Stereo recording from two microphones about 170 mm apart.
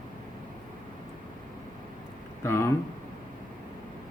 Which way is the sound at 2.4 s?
15° left (ahead or behind).